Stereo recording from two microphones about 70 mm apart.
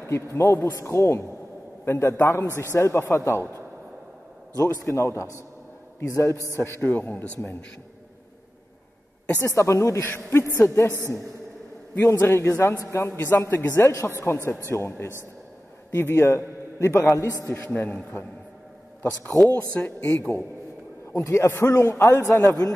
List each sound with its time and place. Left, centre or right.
0.0 s a man's voice: left
6.8 s speech: left
9.4 s a man's voice: left
10.0 s a man's voice: left
17.1 s a man's voice: left
17.7 s speech: left
19.5 s speech: centre
21.2 s a man's voice: left
22.5 s a man's voice: left